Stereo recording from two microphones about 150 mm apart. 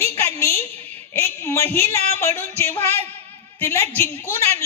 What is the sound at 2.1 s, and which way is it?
Music, 15° left (ahead or behind).